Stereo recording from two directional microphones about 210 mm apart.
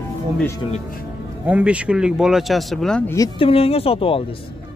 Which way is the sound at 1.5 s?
5° right (ahead or behind).